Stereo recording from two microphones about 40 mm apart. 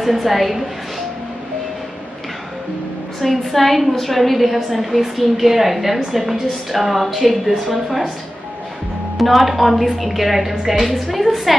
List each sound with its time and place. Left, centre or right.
0.0 s a woman's voice: centre
3.2 s a woman's voice: centre
9.2 s a woman's voice: centre